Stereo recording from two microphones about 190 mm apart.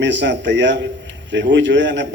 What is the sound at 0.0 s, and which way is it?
Speech, 70° right (ahead or behind).